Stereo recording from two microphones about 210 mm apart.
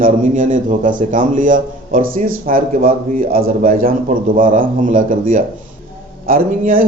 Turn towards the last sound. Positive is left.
turn(degrees=-45)  # may be behind; listen again after turning